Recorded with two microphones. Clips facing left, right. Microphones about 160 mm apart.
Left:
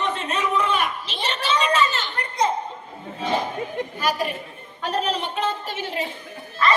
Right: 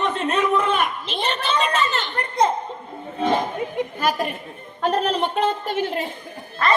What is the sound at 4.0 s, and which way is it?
A woman's voice, 50° right (ahead or behind).